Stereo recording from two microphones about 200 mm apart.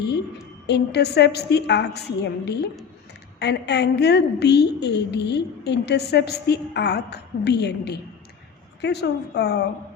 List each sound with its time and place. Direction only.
0.7 s a woman's voice: 55° left (ahead or behind)